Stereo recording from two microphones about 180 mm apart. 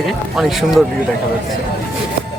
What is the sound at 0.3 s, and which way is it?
Speech, centre (ahead or behind).